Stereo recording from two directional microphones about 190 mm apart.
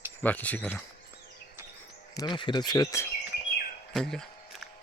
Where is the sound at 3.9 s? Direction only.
Centre (ahead or behind).